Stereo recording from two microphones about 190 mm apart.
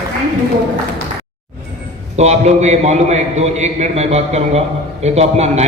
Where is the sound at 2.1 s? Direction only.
35° right (ahead or behind).